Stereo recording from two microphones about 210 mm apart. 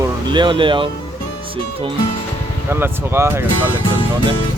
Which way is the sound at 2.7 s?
10° right (ahead or behind).